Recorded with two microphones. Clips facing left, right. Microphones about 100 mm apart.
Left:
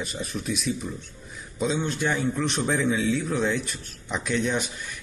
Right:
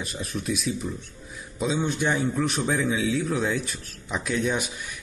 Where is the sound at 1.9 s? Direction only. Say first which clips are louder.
Right 1 dB; 15° right (ahead or behind).